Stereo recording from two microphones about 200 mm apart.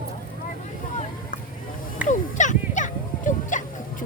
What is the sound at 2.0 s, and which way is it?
Music, 40° left (ahead or behind).